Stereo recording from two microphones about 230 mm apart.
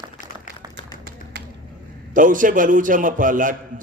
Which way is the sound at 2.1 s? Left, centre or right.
Right.